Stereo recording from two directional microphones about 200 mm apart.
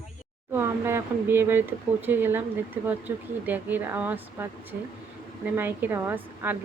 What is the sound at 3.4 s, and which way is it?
Speech, 10° right (ahead or behind).